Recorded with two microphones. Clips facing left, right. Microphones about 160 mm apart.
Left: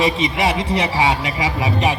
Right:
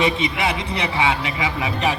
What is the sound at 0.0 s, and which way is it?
A man's voice, 25° left (ahead or behind).